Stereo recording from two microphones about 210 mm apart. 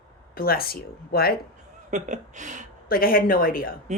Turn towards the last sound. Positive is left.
turn(degrees=45)  # may be behind; listen again after turning